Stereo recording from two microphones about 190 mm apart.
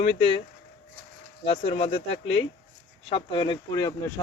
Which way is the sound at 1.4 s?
30° left (ahead or behind).